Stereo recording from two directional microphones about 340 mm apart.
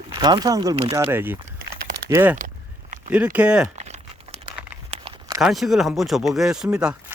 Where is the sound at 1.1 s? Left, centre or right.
Centre.